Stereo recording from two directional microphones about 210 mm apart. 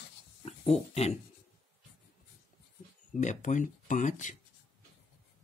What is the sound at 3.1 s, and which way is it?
Speech, 35° left (ahead or behind).